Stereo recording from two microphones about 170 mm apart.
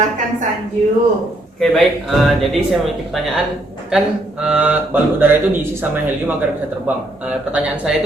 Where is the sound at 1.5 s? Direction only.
Centre (ahead or behind).